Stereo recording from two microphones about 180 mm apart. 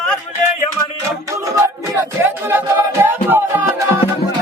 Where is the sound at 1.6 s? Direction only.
15° right (ahead or behind).